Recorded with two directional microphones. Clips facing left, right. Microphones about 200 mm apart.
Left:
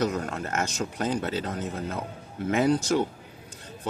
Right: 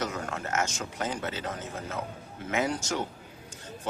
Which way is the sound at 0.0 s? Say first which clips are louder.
Left 5 dB; 35° left (ahead or behind).